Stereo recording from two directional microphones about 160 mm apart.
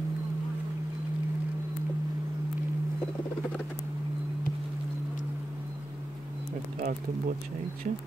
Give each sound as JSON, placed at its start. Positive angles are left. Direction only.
{"t": 6.8, "sound": "speech", "side_deg": -55}